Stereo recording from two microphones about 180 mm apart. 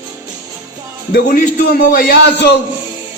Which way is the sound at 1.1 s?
50° left (ahead or behind).